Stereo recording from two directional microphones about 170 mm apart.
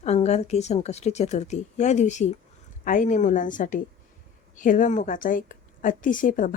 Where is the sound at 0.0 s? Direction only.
40° left (ahead or behind).